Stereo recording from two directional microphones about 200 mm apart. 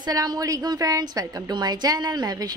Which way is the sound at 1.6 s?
20° right (ahead or behind).